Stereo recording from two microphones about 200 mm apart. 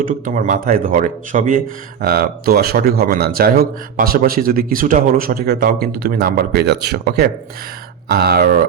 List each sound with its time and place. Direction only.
0.0 s speech: 40° right (ahead or behind)